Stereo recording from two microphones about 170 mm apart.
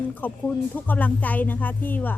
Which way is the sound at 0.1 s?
10° left (ahead or behind).